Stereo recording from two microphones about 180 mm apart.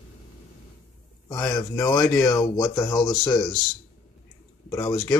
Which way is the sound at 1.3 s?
20° left (ahead or behind).